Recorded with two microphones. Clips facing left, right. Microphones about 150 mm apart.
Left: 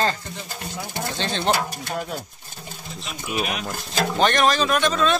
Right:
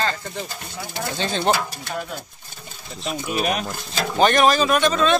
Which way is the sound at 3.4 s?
40° right (ahead or behind).